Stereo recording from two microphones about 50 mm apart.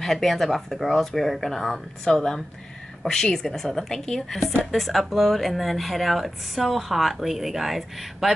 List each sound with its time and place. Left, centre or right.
0.0 s speech: centre